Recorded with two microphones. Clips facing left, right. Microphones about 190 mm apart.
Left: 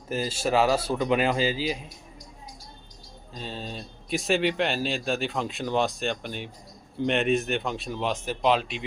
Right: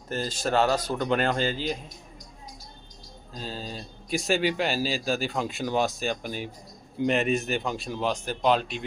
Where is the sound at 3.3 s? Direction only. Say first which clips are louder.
Even; centre (ahead or behind).